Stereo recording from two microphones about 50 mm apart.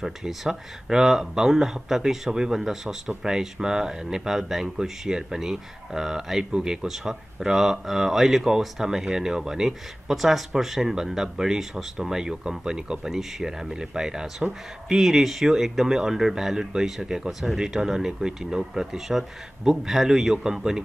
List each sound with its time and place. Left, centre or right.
0.0 s speech: centre